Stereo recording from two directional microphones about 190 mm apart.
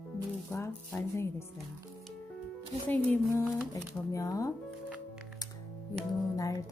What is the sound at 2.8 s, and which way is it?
Speech, 10° left (ahead or behind).